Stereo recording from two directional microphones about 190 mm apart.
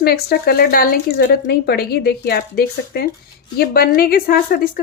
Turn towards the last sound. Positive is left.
turn(degrees=50)  # may be behind; listen again after turning